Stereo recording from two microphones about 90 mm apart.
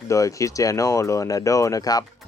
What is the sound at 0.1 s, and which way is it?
Speech, 35° left (ahead or behind).